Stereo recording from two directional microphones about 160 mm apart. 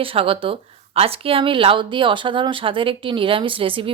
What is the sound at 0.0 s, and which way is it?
Speech, 35° right (ahead or behind).